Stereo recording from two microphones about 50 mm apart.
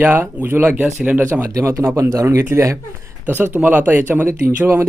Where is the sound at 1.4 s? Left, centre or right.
Right.